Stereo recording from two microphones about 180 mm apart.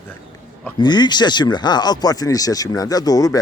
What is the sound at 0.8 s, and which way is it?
Speech, 25° left (ahead or behind).